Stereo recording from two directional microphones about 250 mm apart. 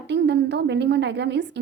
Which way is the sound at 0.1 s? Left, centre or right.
Right.